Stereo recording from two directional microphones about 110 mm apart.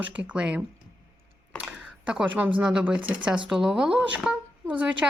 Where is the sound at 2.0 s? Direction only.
10° right (ahead or behind).